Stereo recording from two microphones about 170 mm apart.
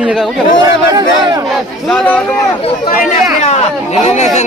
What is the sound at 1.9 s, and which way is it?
Speech, 5° left (ahead or behind).